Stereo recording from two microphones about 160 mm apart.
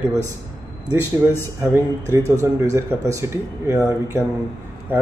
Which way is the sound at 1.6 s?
15° right (ahead or behind).